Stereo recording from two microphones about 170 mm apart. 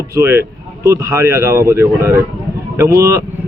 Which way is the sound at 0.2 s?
15° right (ahead or behind).